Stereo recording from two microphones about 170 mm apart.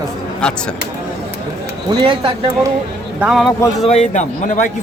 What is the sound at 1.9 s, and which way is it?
Speech, 30° right (ahead or behind).